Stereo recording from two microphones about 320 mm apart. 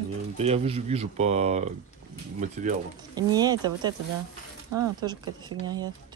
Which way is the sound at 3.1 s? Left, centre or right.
Centre.